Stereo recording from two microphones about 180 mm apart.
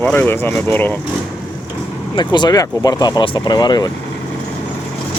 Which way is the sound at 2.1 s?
25° left (ahead or behind).